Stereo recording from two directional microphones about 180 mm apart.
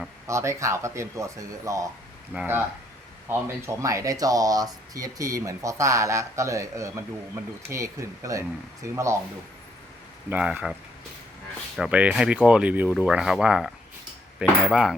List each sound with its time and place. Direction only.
0.3 s speech: 15° right (ahead or behind)
10.2 s speech: 5° right (ahead or behind)
11.8 s speech: 5° right (ahead or behind)
14.7 s speech: 5° right (ahead or behind)